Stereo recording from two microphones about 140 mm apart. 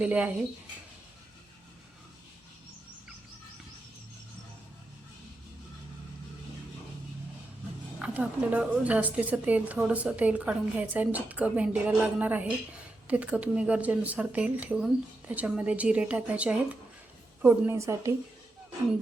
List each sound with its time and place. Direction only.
0.0 s a woman's voice: 10° right (ahead or behind)
7.9 s a woman's voice: 10° right (ahead or behind)
17.4 s a woman's voice: 20° right (ahead or behind)